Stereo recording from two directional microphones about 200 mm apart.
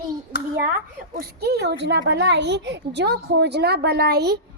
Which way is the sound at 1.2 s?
55° right (ahead or behind).